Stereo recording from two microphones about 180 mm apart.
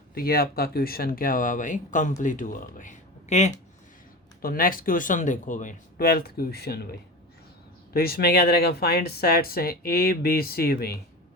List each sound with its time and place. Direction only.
0.1 s speech: 55° left (ahead or behind); by 3.5 s 40° left (ahead or behind)
4.4 s speech: 50° left (ahead or behind)
7.9 s speech: 60° left (ahead or behind)